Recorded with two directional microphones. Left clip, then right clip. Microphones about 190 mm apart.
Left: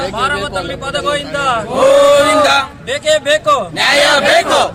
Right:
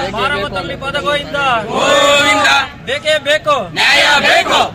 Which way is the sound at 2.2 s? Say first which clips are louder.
Left 1 dB; 30° left (ahead or behind).